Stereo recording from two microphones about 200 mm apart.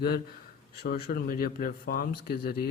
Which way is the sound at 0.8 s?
50° left (ahead or behind).